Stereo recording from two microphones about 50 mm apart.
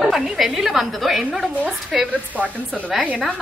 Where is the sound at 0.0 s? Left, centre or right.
Centre.